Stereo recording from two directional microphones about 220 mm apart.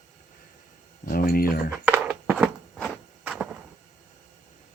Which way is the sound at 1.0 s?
40° left (ahead or behind).